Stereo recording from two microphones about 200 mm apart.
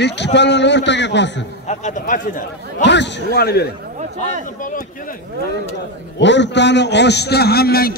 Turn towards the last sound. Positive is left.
turn(degrees=50)  # may be behind; listen again after turning